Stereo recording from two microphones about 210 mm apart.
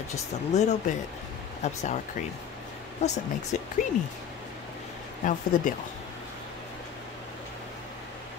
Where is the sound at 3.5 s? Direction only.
35° left (ahead or behind).